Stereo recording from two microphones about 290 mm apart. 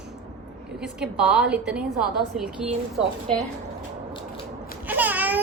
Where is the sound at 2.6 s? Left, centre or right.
Centre.